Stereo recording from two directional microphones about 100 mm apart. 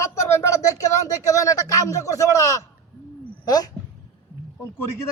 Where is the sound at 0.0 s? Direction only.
30° left (ahead or behind).